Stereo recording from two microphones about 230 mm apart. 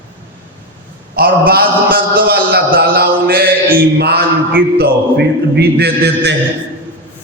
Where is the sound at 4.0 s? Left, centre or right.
Right.